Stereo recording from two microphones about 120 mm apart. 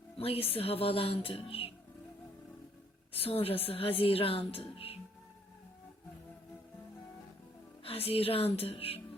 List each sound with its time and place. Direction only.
0.2 s a woman's voice: 55° left (ahead or behind)
3.1 s a woman's voice: 55° left (ahead or behind)
7.9 s a woman's voice: 55° left (ahead or behind)